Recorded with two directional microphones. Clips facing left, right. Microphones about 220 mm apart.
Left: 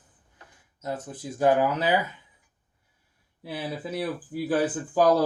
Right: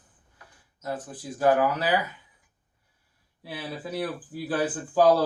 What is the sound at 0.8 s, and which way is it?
Speech, 25° left (ahead or behind).